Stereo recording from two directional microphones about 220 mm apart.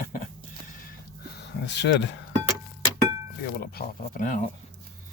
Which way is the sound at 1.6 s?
50° left (ahead or behind).